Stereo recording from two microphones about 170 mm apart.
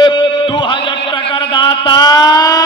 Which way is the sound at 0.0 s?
30° left (ahead or behind).